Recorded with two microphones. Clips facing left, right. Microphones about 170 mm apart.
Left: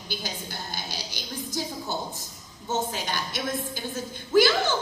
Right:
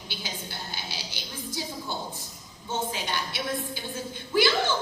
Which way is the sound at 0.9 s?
40° left (ahead or behind).